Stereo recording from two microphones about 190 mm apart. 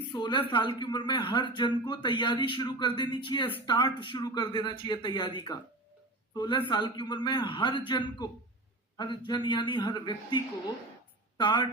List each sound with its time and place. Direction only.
0.1 s a woman's voice: 25° left (ahead or behind)